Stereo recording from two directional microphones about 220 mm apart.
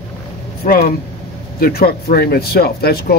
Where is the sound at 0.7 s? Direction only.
40° left (ahead or behind).